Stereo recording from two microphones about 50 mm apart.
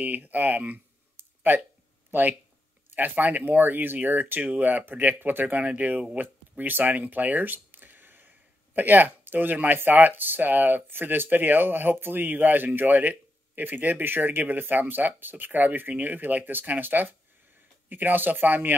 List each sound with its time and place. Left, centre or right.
0.0 s speech: right
2.0 s a sound: right
2.9 s speech: right